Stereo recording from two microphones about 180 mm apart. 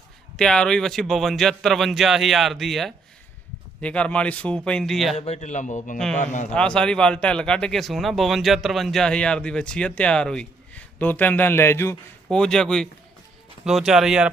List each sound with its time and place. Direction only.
0.3 s a man's voice: 5° left (ahead or behind)
5.1 s a man's voice: 35° left (ahead or behind)
6.5 s a man's voice: 5° left (ahead or behind)